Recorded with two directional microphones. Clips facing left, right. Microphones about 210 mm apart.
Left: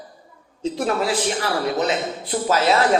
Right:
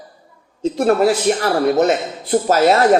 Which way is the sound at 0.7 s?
45° right (ahead or behind).